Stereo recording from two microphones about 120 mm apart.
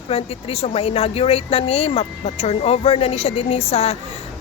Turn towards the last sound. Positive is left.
turn(degrees=55)  # may be behind; listen again after turning